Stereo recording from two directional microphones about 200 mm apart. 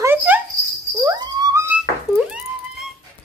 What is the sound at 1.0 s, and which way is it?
Music, 15° right (ahead or behind).